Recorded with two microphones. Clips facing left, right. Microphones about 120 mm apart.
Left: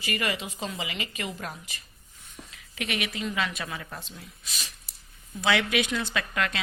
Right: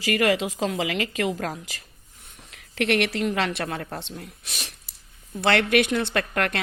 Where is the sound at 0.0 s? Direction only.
90° right.